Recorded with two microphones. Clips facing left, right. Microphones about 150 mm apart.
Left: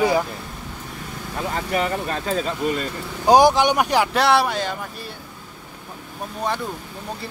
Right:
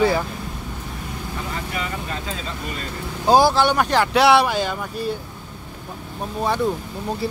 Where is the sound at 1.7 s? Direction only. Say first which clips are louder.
Left 5 dB; 45° left (ahead or behind).